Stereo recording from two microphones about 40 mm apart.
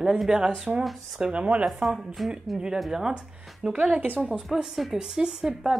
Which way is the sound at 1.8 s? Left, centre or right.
Centre.